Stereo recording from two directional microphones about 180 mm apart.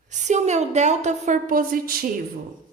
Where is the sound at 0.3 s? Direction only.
40° right (ahead or behind).